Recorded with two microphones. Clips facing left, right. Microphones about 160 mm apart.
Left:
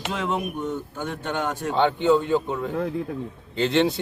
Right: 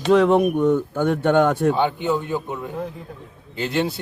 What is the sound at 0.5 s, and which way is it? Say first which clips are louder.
Speech: right 10 dB; 65° right (ahead or behind).